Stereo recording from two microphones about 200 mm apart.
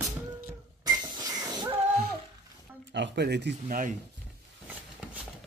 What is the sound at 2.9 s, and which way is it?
Speech, 60° right (ahead or behind).